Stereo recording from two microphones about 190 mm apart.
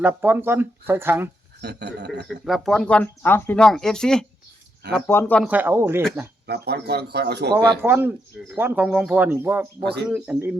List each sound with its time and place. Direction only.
0.0 s speech: 10° right (ahead or behind)
1.6 s speech: 60° right (ahead or behind)
2.2 s speech: centre (ahead or behind)
5.4 s speech: 10° right (ahead or behind)
6.5 s speech: 60° right (ahead or behind)
7.5 s speech: 10° right (ahead or behind)